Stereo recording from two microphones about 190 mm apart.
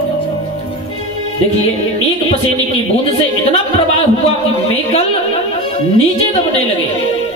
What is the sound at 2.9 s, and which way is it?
Speech, 30° left (ahead or behind).